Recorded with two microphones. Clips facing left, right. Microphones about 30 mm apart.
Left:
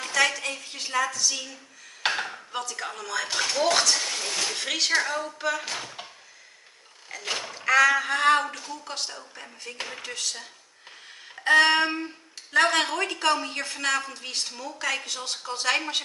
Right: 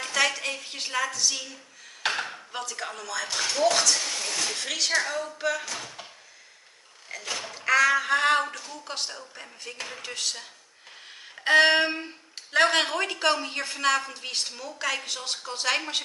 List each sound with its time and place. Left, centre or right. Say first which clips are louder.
0.0 s a sound: left 1 dB; centre
0.8 s speech: left 1 dB; centre
2.0 s speech: left 1 dB; centre
5.8 s speech: left 2 dB; centre
7.4 s speech: left 2 dB; centre